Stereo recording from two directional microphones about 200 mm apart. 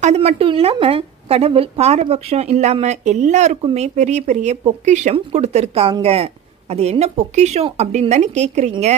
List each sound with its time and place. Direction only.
0.0 s speech: 30° right (ahead or behind)